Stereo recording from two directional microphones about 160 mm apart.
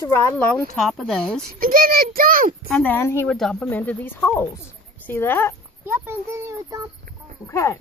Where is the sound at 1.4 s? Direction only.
65° right (ahead or behind).